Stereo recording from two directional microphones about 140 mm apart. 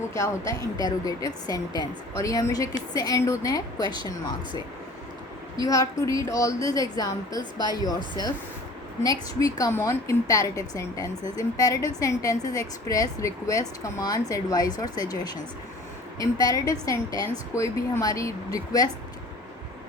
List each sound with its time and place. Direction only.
0.1 s a woman's voice: 25° left (ahead or behind)
5.6 s a woman's voice: 25° left (ahead or behind)
9.4 s a woman's voice: 25° left (ahead or behind)